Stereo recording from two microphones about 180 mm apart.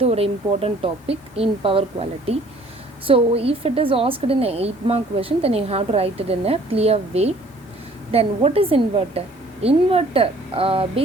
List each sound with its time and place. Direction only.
0.0 s a woman's voice: 35° right (ahead or behind)